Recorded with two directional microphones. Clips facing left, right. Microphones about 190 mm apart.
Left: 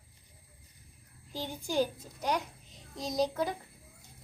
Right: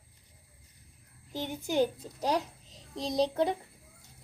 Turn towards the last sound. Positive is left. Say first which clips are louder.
# right 3 dB
turn(degrees=-25)  # may be behind; listen again after turning